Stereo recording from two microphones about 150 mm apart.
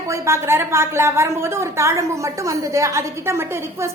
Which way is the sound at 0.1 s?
20° right (ahead or behind).